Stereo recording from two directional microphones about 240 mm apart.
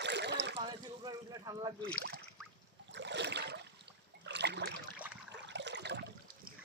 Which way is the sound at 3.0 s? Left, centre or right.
Right.